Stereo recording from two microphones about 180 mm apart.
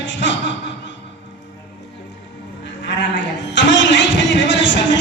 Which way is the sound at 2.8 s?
85° left.